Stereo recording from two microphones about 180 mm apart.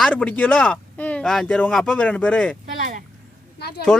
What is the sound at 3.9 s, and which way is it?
Speech, 5° left (ahead or behind).